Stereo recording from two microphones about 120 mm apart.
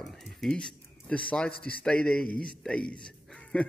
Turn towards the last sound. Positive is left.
turn(degrees=10)  # may be behind; listen again after turning